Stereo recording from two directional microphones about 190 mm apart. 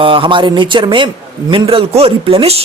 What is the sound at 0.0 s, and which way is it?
A man's voice, 25° right (ahead or behind).